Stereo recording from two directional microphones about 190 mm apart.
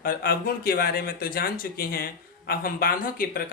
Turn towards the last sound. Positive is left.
turn(degrees=50)  # may be behind; listen again after turning